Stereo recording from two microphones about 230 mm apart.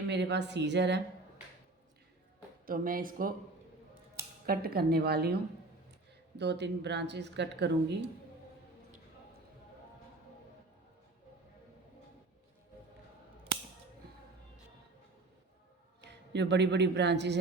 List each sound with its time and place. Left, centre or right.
0.1 s speech: right
2.6 s speech: right
4.4 s speech: right
16.0 s a man's voice: right